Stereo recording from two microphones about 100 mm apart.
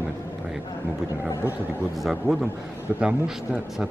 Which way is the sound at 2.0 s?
5° right (ahead or behind).